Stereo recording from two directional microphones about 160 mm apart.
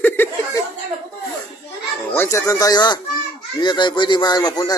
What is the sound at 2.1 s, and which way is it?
A man's voice, 15° left (ahead or behind).